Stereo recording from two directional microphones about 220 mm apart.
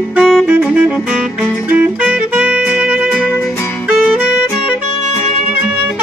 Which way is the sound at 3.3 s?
10° left (ahead or behind).